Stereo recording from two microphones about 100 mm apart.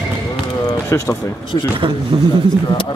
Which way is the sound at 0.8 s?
25° left (ahead or behind).